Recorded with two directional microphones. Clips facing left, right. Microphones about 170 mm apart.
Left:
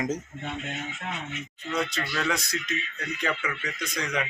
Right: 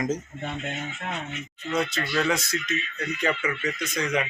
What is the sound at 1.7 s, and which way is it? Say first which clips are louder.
Speech: right 3 dB; centre (ahead or behind).